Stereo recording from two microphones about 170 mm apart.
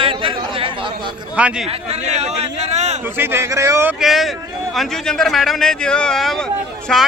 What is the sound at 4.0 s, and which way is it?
A man's voice, centre (ahead or behind).